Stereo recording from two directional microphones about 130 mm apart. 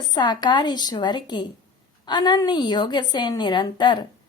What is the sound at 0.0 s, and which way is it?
A woman's voice, 35° left (ahead or behind).